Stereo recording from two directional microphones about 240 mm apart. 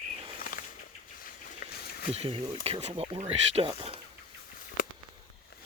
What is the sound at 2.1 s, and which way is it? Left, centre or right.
Speech, right.